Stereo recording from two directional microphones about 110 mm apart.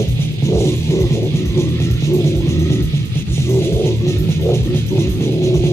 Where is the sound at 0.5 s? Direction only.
25° left (ahead or behind).